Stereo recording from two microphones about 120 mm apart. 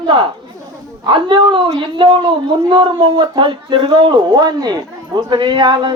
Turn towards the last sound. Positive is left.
turn(degrees=-40)  # may be behind; listen again after turning